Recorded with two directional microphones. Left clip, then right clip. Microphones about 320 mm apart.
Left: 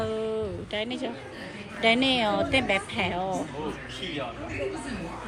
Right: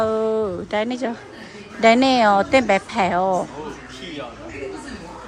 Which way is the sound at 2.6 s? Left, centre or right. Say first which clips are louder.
Right 8 dB; right.